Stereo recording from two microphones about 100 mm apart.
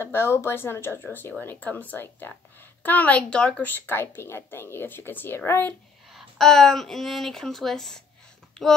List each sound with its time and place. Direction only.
0.0 s a woman's voice: 25° left (ahead or behind)
6.1 s speech: 5° left (ahead or behind)